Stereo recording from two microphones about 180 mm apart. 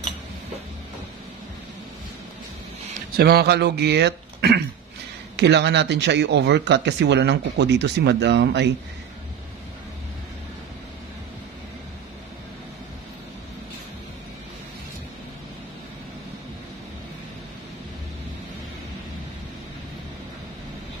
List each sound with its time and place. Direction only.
3.2 s speech: 60° right (ahead or behind)